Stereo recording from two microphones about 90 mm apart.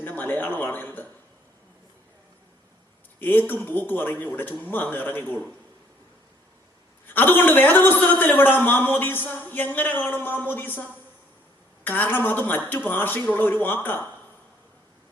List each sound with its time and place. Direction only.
0.0 s a man's voice: 20° left (ahead or behind)
3.2 s a man's voice: 20° left (ahead or behind)
7.1 s a man's voice: 20° left (ahead or behind)